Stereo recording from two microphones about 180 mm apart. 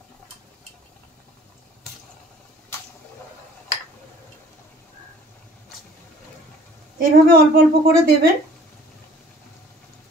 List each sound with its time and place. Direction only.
7.0 s a woman's voice: 50° right (ahead or behind)